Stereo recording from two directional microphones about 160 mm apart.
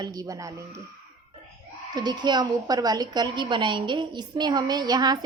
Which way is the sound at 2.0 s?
25° right (ahead or behind).